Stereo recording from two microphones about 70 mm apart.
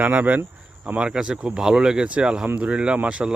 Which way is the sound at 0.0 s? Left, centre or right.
Right.